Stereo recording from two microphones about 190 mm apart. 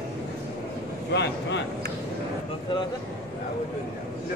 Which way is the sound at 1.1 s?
65° left (ahead or behind).